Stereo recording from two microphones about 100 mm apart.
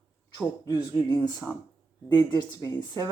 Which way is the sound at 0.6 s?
40° left (ahead or behind).